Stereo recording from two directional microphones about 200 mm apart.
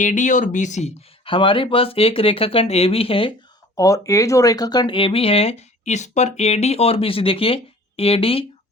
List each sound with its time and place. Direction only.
0.0 s speech: 40° left (ahead or behind)
3.8 s speech: 15° left (ahead or behind)